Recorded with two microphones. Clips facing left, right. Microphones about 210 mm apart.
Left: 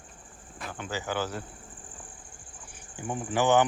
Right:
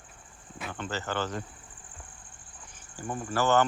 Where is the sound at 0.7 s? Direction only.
10° left (ahead or behind).